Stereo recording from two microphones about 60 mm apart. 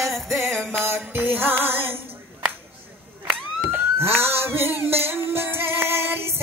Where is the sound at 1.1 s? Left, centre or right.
Right.